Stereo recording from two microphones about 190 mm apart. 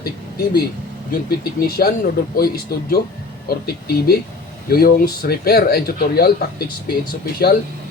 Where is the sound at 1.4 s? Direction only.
55° left (ahead or behind).